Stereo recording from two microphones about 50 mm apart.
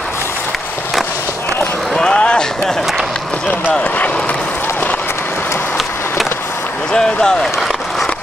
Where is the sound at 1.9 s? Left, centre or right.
Centre.